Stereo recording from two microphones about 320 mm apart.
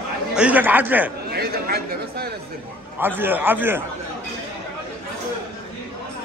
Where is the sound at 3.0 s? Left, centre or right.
Centre.